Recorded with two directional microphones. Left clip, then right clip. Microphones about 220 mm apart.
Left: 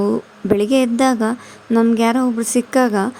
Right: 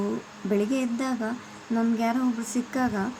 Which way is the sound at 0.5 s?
45° left (ahead or behind).